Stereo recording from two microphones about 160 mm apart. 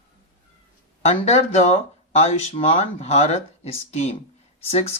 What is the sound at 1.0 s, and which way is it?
Speech, 40° left (ahead or behind).